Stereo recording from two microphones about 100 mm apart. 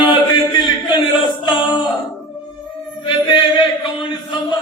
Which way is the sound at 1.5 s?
55° left (ahead or behind).